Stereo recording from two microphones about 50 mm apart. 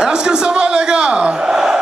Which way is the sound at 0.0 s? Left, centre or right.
Centre.